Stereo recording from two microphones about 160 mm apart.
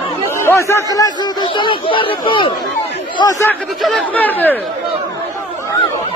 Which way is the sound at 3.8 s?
Centre (ahead or behind).